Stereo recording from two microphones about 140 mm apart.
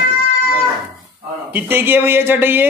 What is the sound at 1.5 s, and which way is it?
A man's voice, 15° right (ahead or behind).